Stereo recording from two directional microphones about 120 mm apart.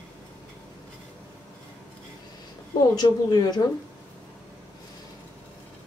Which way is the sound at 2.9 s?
30° left (ahead or behind).